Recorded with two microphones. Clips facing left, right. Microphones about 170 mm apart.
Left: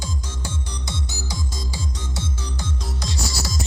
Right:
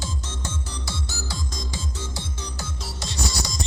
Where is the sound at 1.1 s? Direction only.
20° left (ahead or behind).